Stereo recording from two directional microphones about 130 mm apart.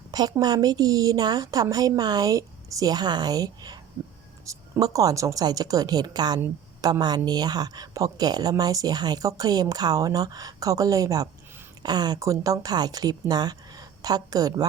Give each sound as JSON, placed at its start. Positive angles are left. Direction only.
{"t": 0.1, "sound": "a woman's voice", "side_deg": -30}
{"t": 4.5, "sound": "a sound", "side_deg": -25}
{"t": 4.9, "sound": "a woman's voice", "side_deg": -25}